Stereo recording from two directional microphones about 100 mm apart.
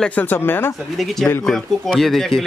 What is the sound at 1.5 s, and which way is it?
Speech, 5° left (ahead or behind).